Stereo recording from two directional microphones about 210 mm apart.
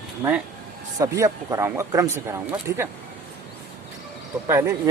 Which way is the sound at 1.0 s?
15° right (ahead or behind).